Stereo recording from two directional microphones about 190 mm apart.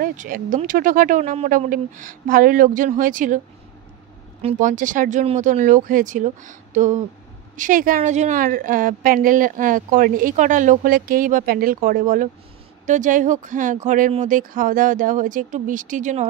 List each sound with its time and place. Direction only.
0.0 s a woman's voice: 45° right (ahead or behind)
4.4 s a woman's voice: 35° right (ahead or behind)